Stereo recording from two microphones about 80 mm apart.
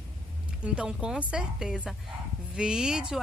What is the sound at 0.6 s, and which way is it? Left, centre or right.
A woman's voice, centre.